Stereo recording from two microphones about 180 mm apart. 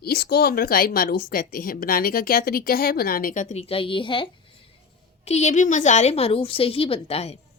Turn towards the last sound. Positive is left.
turn(degrees=35)  # may be behind; listen again after turning